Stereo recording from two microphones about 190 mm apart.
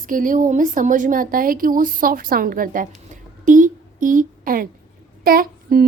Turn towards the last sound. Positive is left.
turn(degrees=-50)  # may be behind; listen again after turning